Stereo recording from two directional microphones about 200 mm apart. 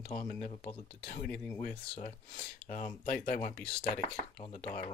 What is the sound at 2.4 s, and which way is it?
Speech, 40° left (ahead or behind).